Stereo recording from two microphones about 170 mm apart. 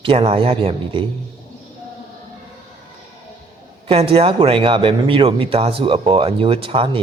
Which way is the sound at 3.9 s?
35° right (ahead or behind).